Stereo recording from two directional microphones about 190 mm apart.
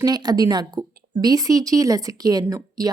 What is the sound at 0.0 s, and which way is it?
A woman's voice, 20° right (ahead or behind).